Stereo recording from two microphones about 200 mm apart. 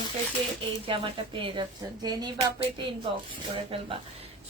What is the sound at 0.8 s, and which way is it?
A woman's voice, 25° right (ahead or behind).